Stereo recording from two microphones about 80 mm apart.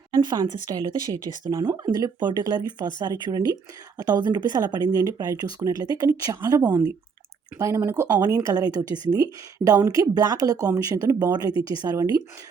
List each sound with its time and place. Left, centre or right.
0.1 s a woman's voice: right
2.1 s a woman's voice: right
7.8 s speech: right
8.1 s a woman's voice: right